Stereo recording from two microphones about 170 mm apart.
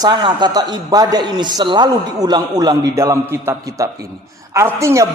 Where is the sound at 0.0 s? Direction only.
25° right (ahead or behind).